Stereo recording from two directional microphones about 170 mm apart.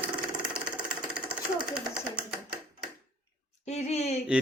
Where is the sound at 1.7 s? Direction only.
5° right (ahead or behind).